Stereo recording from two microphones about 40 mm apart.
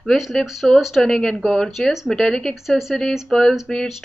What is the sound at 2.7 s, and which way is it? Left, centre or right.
Speech, centre.